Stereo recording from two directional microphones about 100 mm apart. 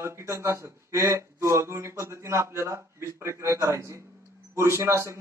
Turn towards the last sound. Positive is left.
turn(degrees=-25)  # may be behind; listen again after turning